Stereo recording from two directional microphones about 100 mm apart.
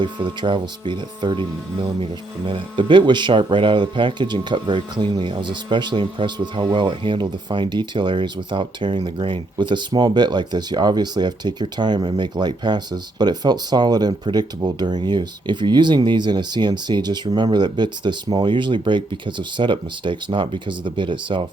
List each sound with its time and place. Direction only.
0.0 s speech: 50° right (ahead or behind)